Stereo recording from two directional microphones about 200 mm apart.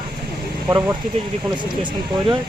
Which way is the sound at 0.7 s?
15° right (ahead or behind).